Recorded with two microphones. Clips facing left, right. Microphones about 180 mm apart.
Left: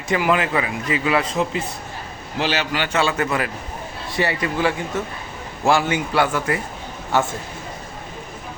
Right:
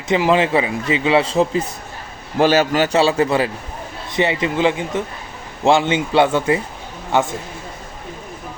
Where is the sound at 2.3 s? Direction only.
45° right (ahead or behind); by 7.3 s 20° right (ahead or behind).